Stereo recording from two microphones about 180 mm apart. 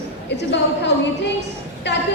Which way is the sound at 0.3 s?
75° left (ahead or behind).